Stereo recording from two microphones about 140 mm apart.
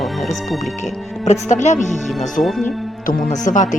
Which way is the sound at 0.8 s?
55° left (ahead or behind).